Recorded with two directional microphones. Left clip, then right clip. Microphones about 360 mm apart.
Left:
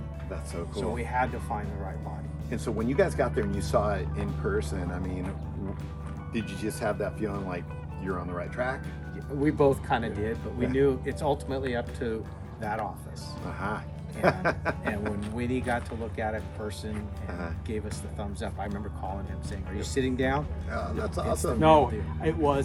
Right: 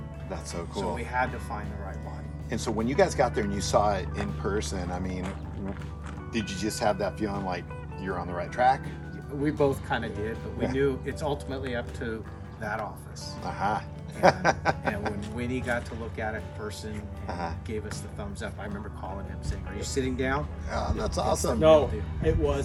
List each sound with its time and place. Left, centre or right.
0.8 s speech: centre
2.5 s speech: right
6.6 s speech: right
9.4 s speech: centre
13.5 s speech: right
15.2 s speech: centre
17.2 s speech: right
17.7 s speech: centre
19.7 s speech: centre
20.7 s speech: right
21.6 s speech: centre